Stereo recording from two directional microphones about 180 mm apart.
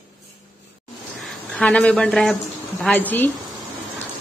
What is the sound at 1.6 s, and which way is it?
A woman's voice, 5° left (ahead or behind).